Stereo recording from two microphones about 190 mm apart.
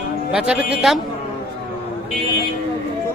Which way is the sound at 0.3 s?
5° right (ahead or behind).